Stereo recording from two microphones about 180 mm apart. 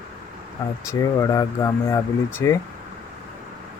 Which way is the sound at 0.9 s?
15° left (ahead or behind).